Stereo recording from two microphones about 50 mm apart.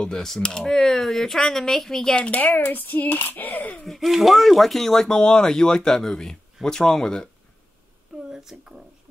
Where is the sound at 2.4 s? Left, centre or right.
Left.